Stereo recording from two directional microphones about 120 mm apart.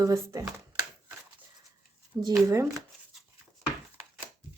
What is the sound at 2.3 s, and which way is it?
Speech, 25° right (ahead or behind).